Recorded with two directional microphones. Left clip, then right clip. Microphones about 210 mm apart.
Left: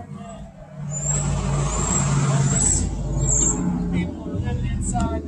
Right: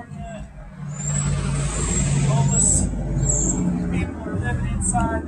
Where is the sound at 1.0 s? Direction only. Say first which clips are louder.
Left 1 dB; 50° left (ahead or behind).